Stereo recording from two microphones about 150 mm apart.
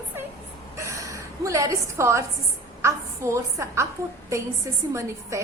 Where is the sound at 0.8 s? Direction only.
20° right (ahead or behind).